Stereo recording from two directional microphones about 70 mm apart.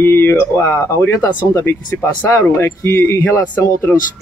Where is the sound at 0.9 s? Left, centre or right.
Left.